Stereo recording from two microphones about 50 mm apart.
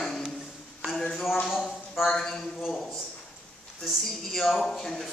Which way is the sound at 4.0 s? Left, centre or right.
Centre.